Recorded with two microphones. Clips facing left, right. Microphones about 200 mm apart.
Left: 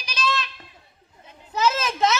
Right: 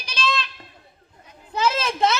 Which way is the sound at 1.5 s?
30° right (ahead or behind).